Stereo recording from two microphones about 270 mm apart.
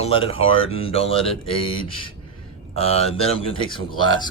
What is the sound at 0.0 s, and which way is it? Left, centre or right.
Speech, left.